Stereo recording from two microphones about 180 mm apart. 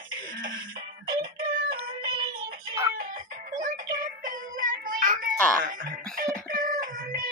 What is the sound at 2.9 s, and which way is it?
Music, 50° right (ahead or behind).